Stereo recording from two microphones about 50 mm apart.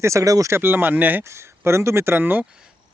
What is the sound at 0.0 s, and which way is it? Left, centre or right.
Speech, right.